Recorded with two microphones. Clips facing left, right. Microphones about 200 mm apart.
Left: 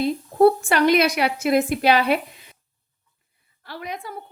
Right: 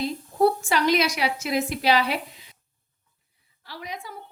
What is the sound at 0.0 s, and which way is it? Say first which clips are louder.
A woman's voice: left 5 dB; 55° left (ahead or behind).